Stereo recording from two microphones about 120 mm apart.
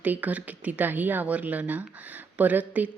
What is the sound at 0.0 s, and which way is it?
A woman's voice, 15° right (ahead or behind).